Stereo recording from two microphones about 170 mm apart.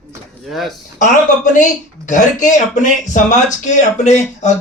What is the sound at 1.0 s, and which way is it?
A man's voice, 50° left (ahead or behind).